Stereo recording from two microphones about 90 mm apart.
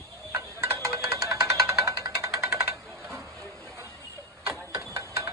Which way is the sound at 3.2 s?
Centre (ahead or behind).